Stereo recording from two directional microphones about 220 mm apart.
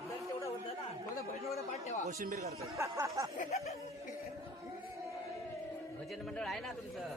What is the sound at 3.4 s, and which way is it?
Speech, 30° left (ahead or behind).